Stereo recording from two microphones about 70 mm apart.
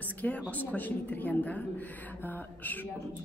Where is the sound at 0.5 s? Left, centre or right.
Left.